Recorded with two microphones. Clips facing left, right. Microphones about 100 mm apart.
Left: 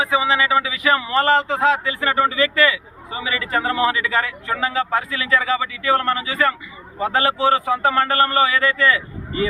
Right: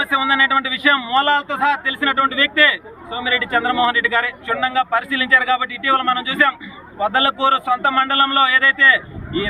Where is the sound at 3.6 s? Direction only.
35° right (ahead or behind).